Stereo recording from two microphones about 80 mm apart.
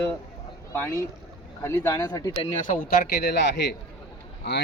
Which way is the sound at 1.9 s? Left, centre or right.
Left.